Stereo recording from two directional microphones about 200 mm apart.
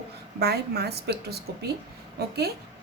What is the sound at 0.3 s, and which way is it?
A woman's voice, 55° right (ahead or behind).